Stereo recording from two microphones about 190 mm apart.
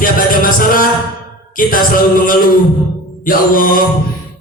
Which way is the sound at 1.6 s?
45° left (ahead or behind).